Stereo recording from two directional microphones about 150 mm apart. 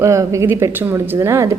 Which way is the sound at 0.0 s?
20° right (ahead or behind).